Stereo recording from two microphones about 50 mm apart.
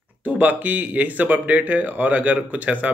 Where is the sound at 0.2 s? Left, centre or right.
Right.